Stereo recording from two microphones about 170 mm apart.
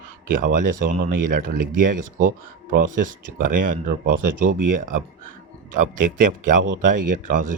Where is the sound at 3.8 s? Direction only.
50° right (ahead or behind).